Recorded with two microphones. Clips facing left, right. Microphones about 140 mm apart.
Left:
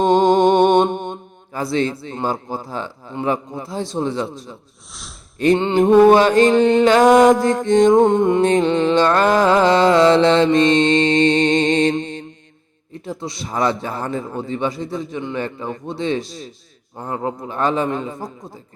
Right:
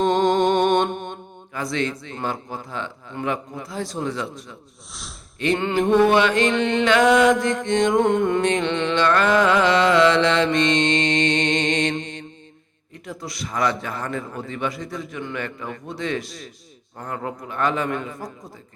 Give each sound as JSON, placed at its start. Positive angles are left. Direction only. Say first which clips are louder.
{"t": 0.0, "sound": "music", "louder": "left 5 dB", "side_deg": 25}
{"t": 3.2, "sound": "a man's voice", "louder": "left 5 dB", "side_deg": 25}
{"t": 5.5, "sound": "a man's voice", "louder": "left 5 dB", "side_deg": 25}
{"t": 5.9, "sound": "music", "louder": "left 6 dB", "side_deg": 40}
{"t": 7.9, "sound": "a man's voice", "louder": "left 5 dB", "side_deg": 25}
{"t": 8.4, "sound": "music", "louder": "left 6 dB", "side_deg": 35}
{"t": 12.9, "sound": "a man's voice", "louder": "left 6 dB", "side_deg": 25}